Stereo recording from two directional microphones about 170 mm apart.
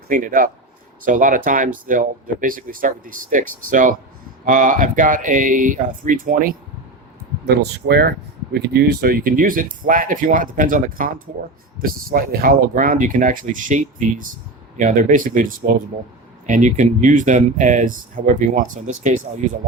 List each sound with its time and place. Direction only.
0.1 s speech: 50° right (ahead or behind)
7.4 s speech: 75° right (ahead or behind); by 19.2 s 45° right (ahead or behind)